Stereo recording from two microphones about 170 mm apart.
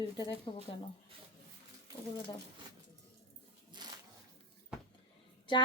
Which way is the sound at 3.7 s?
25° right (ahead or behind).